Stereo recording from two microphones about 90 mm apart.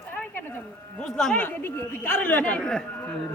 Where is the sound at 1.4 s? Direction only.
20° left (ahead or behind).